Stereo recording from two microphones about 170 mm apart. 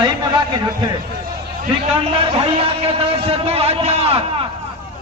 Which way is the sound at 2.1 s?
35° right (ahead or behind).